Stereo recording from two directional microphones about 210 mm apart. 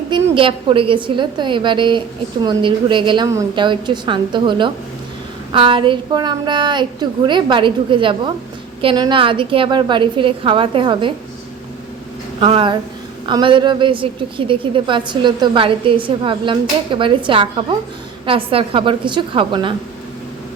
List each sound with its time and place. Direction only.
0.1 s a woman's voice: 25° right (ahead or behind)
12.4 s a woman's voice: 25° right (ahead or behind)